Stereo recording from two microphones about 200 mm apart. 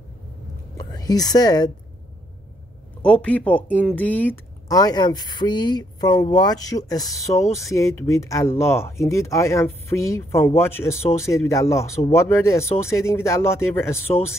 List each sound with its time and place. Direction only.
0.7 s a woman's voice: 20° left (ahead or behind)
3.0 s a woman's voice: 5° left (ahead or behind)